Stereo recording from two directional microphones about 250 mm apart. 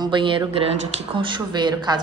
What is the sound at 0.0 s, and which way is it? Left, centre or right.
A woman's voice, centre.